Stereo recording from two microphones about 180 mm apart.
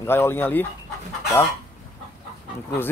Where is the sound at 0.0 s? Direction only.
15° left (ahead or behind).